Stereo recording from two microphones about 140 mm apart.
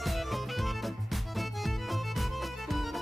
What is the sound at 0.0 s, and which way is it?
Music, centre (ahead or behind).